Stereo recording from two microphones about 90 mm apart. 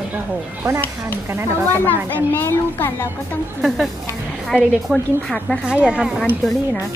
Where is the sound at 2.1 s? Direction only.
25° left (ahead or behind).